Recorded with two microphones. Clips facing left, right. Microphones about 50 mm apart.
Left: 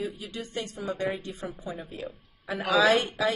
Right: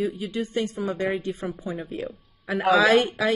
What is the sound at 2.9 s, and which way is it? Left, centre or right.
Speech, right.